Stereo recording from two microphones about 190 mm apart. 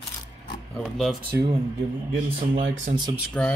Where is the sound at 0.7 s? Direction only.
Centre (ahead or behind).